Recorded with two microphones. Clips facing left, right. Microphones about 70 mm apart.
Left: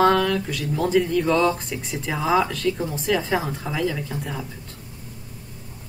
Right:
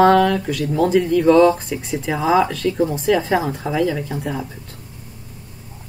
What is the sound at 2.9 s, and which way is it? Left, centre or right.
Speech, centre.